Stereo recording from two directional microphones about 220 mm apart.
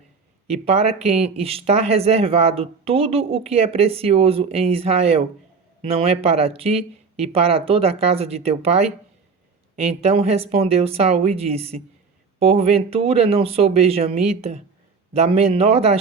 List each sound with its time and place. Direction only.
0.4 s speech: 30° right (ahead or behind)
10.0 s speech: 25° right (ahead or behind)